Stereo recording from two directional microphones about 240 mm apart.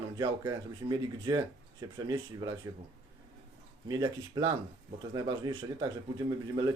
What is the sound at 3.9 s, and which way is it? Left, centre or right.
Speech, centre.